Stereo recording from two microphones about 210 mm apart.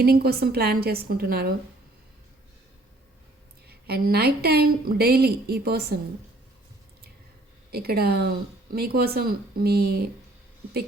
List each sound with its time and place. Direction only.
0.0 s a woman's voice: 45° right (ahead or behind)
3.7 s a woman's voice: 50° right (ahead or behind)
7.7 s a woman's voice: 45° right (ahead or behind)